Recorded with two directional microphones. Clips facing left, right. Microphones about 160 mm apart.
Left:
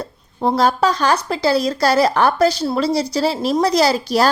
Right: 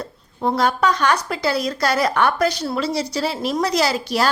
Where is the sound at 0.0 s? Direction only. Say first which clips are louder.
Left 3 dB; 30° left (ahead or behind).